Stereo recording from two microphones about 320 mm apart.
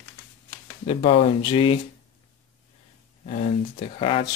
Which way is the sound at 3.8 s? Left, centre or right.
Centre.